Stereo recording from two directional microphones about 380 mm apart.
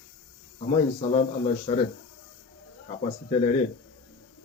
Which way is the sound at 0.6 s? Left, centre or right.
Centre.